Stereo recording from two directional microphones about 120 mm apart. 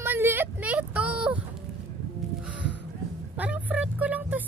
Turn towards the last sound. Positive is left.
turn(degrees=-15)  # may be behind; listen again after turning